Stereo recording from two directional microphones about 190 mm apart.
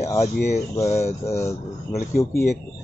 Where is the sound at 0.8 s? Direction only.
15° left (ahead or behind).